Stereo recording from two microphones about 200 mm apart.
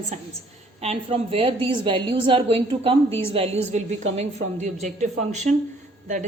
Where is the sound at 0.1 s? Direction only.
35° right (ahead or behind).